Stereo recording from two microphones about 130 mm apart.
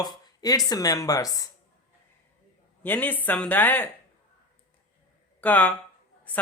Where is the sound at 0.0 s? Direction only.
30° left (ahead or behind).